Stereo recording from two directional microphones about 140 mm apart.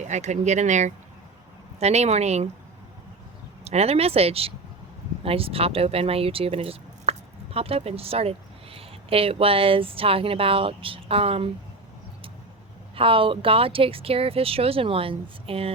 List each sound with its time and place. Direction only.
0.0 s speech: 60° right (ahead or behind)
3.6 s speech: 50° right (ahead or behind)
13.0 s speech: 40° right (ahead or behind)